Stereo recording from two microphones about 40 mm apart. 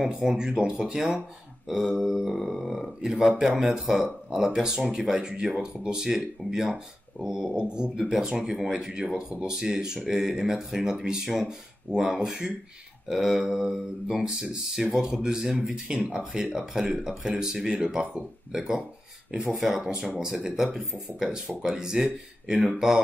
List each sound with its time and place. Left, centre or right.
0.0 s speech: centre
1.7 s a sound: centre
3.1 s speech: centre
18.5 s speech: centre
19.7 s speech: centre